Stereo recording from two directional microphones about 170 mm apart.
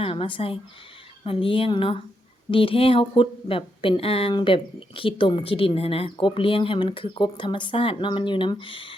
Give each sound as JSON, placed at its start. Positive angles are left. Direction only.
{"t": 0.0, "sound": "a woman's voice", "side_deg": 30}